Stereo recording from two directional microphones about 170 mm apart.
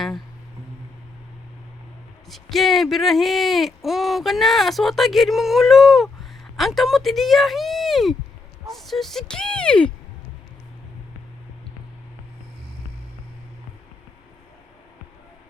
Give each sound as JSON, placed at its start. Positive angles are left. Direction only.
{"t": 2.3, "sound": "speech", "side_deg": 0}